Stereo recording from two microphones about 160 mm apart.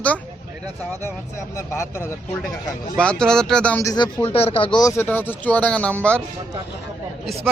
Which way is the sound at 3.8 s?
20° left (ahead or behind).